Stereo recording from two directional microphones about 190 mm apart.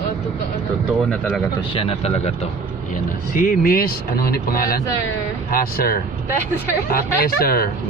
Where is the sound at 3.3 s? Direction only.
50° left (ahead or behind).